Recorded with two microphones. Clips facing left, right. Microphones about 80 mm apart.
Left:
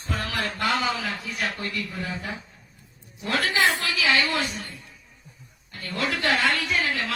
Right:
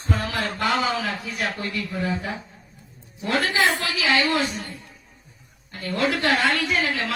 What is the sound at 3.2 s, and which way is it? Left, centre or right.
A man's voice, right.